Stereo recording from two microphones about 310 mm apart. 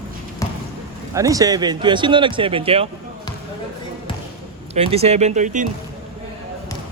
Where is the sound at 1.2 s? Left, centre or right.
Centre.